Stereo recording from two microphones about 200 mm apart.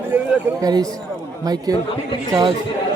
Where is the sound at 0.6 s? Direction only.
20° right (ahead or behind).